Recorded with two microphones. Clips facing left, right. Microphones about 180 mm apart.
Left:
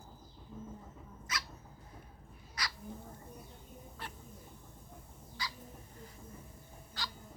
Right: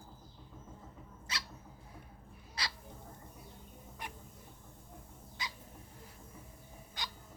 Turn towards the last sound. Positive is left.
turn(degrees=-20)  # may be behind; listen again after turning